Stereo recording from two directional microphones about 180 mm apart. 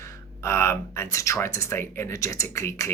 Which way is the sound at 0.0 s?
15° left (ahead or behind).